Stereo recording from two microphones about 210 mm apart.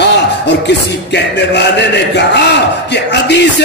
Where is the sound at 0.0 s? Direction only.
55° left (ahead or behind).